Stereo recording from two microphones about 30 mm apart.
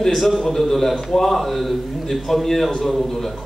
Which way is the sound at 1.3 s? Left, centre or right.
Centre.